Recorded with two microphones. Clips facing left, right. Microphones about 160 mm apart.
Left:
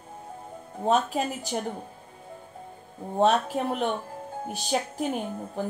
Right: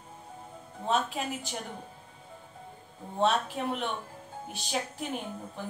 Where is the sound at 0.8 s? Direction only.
45° left (ahead or behind).